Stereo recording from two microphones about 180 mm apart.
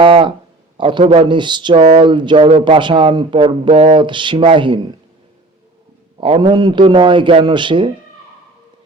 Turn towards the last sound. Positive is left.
turn(degrees=-25)  # may be behind; listen again after turning